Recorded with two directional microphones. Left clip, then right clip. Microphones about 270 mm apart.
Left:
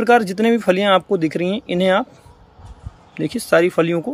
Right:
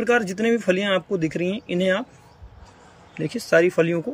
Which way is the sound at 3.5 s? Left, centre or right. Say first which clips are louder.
Left 3 dB; centre.